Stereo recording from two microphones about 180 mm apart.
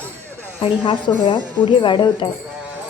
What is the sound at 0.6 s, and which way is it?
Speech, 25° left (ahead or behind).